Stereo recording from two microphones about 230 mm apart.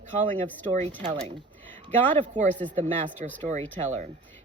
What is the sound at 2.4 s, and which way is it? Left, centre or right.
Speech, centre.